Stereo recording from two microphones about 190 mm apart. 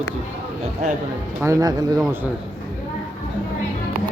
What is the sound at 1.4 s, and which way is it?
Speech, 15° right (ahead or behind).